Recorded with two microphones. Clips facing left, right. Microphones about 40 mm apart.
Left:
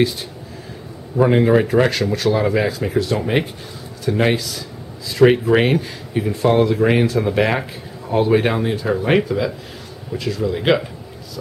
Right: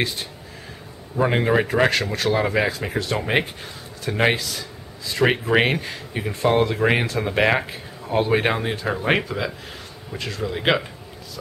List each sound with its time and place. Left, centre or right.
1.3 s speech: centre